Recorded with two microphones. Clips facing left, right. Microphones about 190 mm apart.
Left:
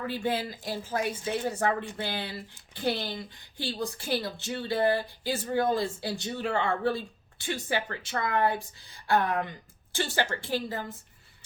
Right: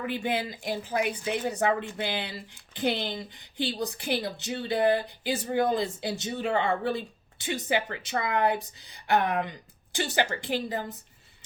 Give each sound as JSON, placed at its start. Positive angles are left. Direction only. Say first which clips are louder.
{"t": 0.0, "sound": "a woman's voice", "louder": "right 1 dB", "side_deg": -15}